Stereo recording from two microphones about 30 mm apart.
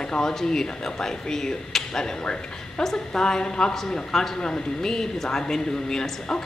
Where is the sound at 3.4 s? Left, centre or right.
Left.